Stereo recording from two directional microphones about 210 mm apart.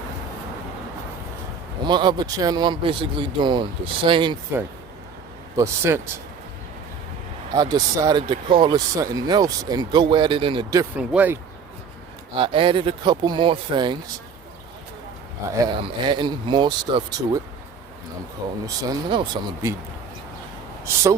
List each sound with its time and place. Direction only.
1.9 s speech: 20° right (ahead or behind)
5.5 s speech: 10° right (ahead or behind)
7.5 s speech: 20° right (ahead or behind)
10.9 s speech: 5° right (ahead or behind)
12.3 s speech: 25° right (ahead or behind)
15.5 s speech: 20° right (ahead or behind)
18.6 s speech: 20° right (ahead or behind)
20.8 s speech: 15° right (ahead or behind)